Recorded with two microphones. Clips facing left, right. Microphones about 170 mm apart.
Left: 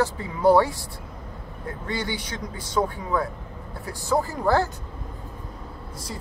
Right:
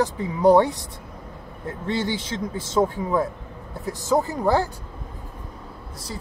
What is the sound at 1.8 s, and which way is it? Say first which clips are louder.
Speech: right 5 dB; 25° right (ahead or behind).